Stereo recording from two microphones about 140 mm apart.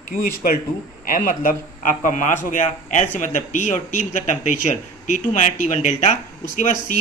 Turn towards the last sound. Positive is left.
turn(degrees=60)  # may be behind; listen again after turning